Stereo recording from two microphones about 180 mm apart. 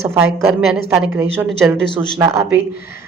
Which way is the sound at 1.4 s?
Centre (ahead or behind).